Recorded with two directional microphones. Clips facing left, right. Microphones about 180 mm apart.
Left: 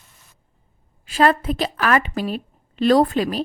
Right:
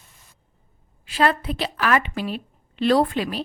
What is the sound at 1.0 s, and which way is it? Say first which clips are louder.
A woman's voice: left 4 dB; 45° left (ahead or behind).